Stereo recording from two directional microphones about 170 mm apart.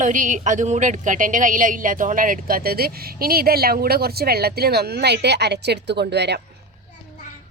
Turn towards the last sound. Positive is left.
turn(degrees=-80)